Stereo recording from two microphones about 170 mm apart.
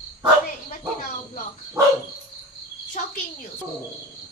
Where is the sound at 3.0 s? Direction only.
45° left (ahead or behind).